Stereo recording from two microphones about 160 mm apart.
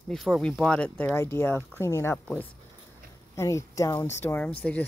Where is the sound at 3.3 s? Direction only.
20° left (ahead or behind).